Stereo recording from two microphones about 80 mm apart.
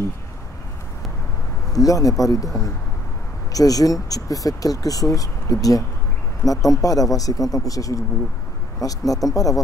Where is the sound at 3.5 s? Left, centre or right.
Left.